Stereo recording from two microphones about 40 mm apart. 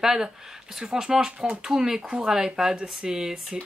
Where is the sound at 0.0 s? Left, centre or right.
Centre.